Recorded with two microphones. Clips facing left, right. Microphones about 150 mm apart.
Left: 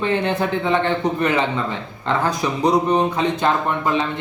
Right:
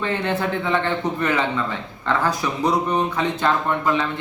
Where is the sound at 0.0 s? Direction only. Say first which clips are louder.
Left 3 dB; 20° left (ahead or behind).